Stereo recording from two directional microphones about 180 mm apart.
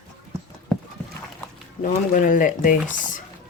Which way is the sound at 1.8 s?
45° left (ahead or behind).